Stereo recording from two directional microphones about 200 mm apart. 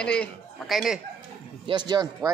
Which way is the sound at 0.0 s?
5° left (ahead or behind).